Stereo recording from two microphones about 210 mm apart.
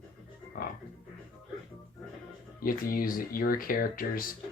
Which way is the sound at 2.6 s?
40° left (ahead or behind).